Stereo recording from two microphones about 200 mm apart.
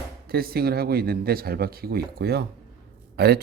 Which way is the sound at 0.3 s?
50° right (ahead or behind).